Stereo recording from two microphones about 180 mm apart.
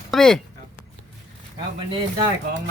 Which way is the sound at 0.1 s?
5° left (ahead or behind).